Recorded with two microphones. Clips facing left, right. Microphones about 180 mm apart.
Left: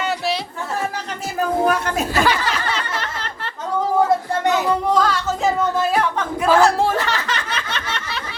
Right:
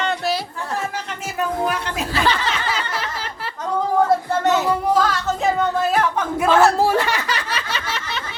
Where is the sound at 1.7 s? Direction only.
45° left (ahead or behind).